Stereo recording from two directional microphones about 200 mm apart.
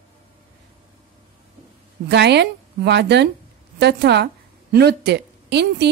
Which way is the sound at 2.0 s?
60° right (ahead or behind).